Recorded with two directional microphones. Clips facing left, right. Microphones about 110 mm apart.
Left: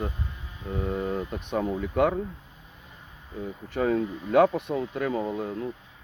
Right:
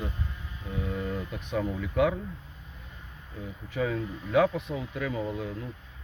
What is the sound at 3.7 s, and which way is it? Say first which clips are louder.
Speech: left 5 dB; 45° left (ahead or behind).